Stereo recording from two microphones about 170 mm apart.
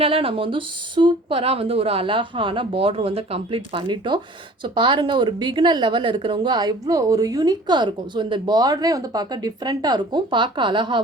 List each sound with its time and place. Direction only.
0.0 s a woman's voice: 35° right (ahead or behind)